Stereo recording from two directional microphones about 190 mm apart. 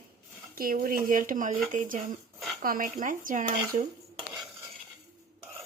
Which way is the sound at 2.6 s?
50° right (ahead or behind).